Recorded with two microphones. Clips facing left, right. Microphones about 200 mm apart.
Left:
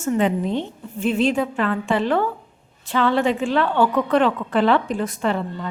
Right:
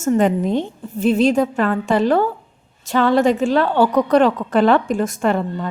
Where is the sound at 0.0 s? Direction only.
45° right (ahead or behind).